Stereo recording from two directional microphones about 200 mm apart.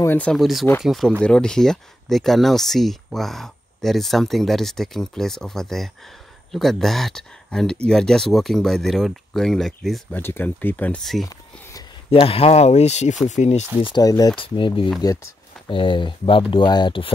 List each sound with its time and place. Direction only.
0.0 s speech: 10° left (ahead or behind)
12.1 s speech: 30° left (ahead or behind)